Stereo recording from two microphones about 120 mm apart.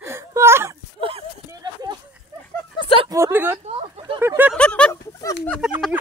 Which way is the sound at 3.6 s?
55° right (ahead or behind).